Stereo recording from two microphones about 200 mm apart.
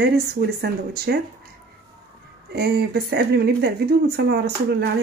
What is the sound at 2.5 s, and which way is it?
Speech, 55° right (ahead or behind).